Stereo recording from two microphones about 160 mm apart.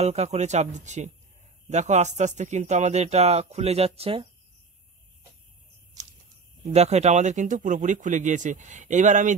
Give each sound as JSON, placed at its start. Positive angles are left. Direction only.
{"t": 0.0, "sound": "speech", "side_deg": -45}
{"t": 6.6, "sound": "speech", "side_deg": -45}